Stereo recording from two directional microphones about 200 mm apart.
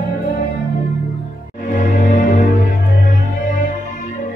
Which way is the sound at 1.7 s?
40° left (ahead or behind).